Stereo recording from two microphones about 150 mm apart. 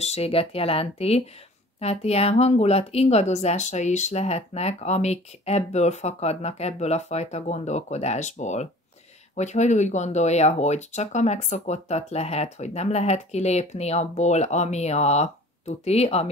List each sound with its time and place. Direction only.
0.0 s speech: 45° left (ahead or behind)